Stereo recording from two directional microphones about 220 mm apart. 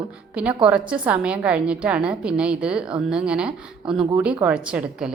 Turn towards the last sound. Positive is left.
turn(degrees=-5)  # may be behind; listen again after turning